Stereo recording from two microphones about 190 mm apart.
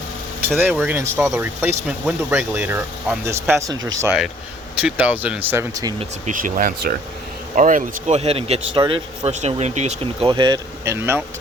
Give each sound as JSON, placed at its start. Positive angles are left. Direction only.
{"t": 0.4, "sound": "speech", "side_deg": -10}
{"t": 4.8, "sound": "speech", "side_deg": -5}
{"t": 6.2, "sound": "a man's voice", "side_deg": -45}